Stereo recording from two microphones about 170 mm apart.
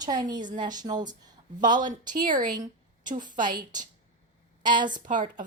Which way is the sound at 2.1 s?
50° right (ahead or behind).